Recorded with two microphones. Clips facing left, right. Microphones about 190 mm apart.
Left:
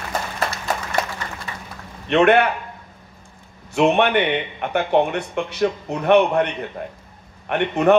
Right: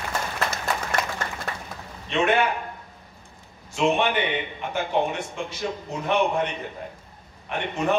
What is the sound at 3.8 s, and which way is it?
A man's voice, 60° left (ahead or behind).